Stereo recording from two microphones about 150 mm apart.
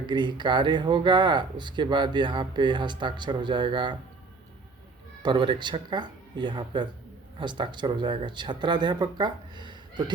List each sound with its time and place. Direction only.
0.0 s speech: 30° right (ahead or behind)
5.2 s speech: 30° right (ahead or behind)